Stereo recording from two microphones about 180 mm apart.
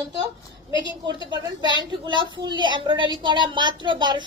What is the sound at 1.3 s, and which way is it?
A woman's voice, 25° right (ahead or behind).